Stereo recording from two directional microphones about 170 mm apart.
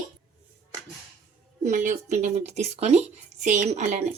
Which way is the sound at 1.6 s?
50° right (ahead or behind).